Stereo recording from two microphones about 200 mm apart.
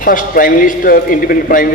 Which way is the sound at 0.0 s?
45° left (ahead or behind).